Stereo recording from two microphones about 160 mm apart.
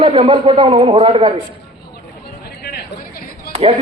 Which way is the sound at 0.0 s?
35° right (ahead or behind).